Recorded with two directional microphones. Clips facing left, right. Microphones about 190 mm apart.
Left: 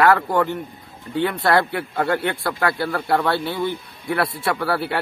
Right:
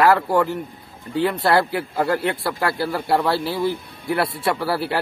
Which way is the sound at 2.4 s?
5° right (ahead or behind).